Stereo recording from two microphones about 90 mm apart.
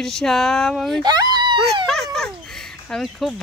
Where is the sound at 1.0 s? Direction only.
50° right (ahead or behind).